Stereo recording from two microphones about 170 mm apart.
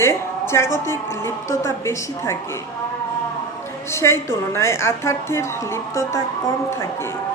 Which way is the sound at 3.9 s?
15° left (ahead or behind).